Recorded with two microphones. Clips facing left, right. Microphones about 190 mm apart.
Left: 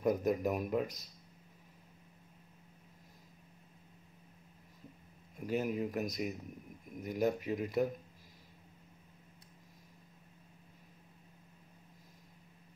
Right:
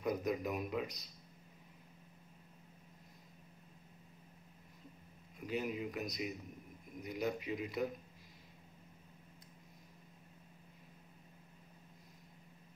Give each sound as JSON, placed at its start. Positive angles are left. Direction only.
{"t": 0.0, "sound": "speech", "side_deg": 45}
{"t": 5.5, "sound": "speech", "side_deg": 45}